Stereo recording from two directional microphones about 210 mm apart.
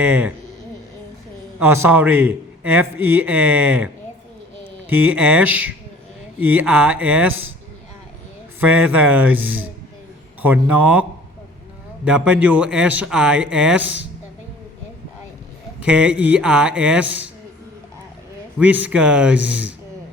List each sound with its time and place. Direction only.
0.0 s a man's voice: 5° right (ahead or behind)
1.5 s a man's voice: 10° right (ahead or behind)
4.9 s a man's voice: 10° right (ahead or behind)
8.6 s a man's voice: 10° right (ahead or behind)
12.0 s speech: 5° right (ahead or behind)
15.8 s speech: 5° right (ahead or behind)
18.6 s a man's voice: 5° right (ahead or behind)